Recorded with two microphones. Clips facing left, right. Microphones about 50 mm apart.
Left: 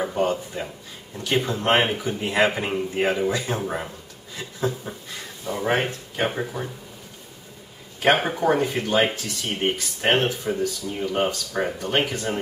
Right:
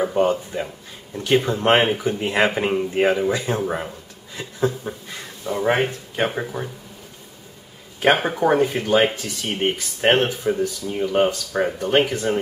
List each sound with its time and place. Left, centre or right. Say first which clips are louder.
0.1 s speech: right 4 dB; centre
4.9 s speech: right 4 dB; right
5.4 s speech: right 3 dB; centre
8.0 s speech: right 2 dB; centre